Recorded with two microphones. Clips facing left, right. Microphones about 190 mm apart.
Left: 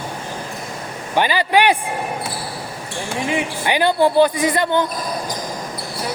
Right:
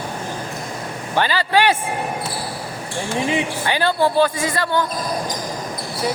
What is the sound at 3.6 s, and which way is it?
A woman's voice, 15° left (ahead or behind).